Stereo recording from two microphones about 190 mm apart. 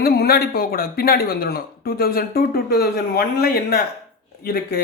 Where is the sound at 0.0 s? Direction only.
55° left (ahead or behind).